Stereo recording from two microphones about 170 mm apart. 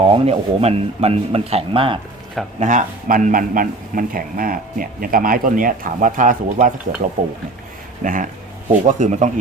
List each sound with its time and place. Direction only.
0.0 s speech: 35° right (ahead or behind)
2.6 s speech: 45° right (ahead or behind)